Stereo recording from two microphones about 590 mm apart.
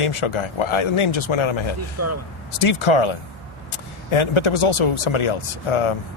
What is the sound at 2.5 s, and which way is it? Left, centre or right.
Speech, left.